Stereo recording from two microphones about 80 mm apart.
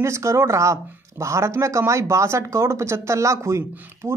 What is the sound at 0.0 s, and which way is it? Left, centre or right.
Speech, right.